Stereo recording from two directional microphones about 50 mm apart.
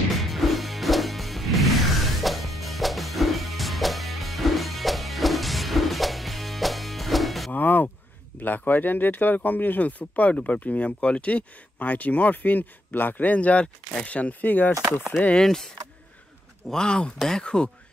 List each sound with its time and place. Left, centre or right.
0.1 s music: centre
7.5 s a sound: left
8.4 s speech: left
15.4 s speech: centre